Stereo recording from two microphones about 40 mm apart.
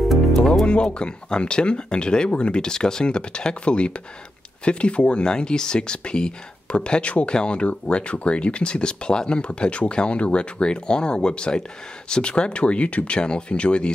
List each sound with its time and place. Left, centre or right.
0.9 s speech: left